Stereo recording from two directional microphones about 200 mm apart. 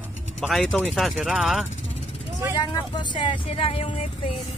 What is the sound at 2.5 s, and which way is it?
Speech, 20° left (ahead or behind).